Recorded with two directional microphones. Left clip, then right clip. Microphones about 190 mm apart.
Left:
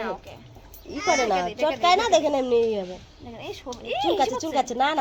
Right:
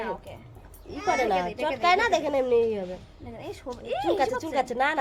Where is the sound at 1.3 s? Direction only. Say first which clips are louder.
Left 2 dB; 30° left (ahead or behind).